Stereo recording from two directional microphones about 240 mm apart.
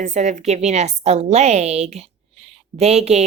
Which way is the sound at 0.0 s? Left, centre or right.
Right.